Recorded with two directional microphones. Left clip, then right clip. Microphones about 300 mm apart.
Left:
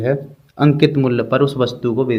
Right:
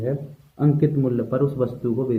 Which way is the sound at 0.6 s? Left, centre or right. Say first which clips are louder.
Left 7 dB; left.